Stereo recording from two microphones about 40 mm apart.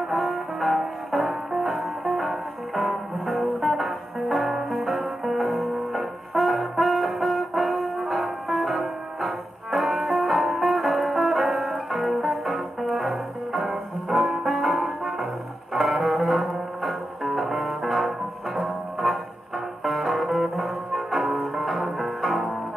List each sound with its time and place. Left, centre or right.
0.1 s music: centre